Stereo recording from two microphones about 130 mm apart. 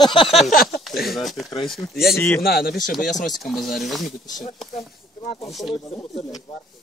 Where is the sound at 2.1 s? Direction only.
15° left (ahead or behind).